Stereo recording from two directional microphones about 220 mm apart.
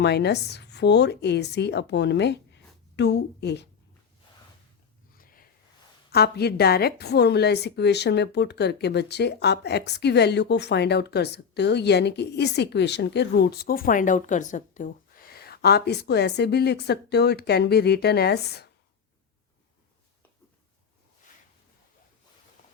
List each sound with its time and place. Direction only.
0.0 s speech: 50° left (ahead or behind)
5.1 s a sound: 40° left (ahead or behind)
6.1 s a woman's voice: 45° left (ahead or behind)